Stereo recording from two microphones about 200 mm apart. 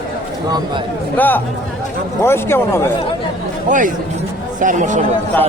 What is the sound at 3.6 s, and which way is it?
Speech, 40° right (ahead or behind).